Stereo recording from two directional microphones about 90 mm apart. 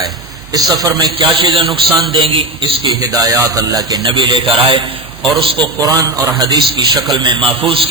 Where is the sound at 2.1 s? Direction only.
90° right.